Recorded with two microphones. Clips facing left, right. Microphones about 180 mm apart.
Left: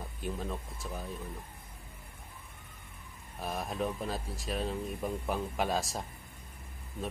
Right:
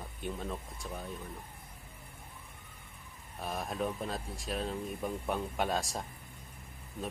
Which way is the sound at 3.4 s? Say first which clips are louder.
Left 1 dB; centre (ahead or behind).